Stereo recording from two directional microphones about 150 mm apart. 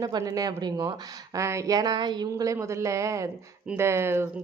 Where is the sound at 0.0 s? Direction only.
25° right (ahead or behind).